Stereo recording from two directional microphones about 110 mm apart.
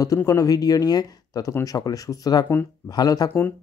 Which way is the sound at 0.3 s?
30° left (ahead or behind).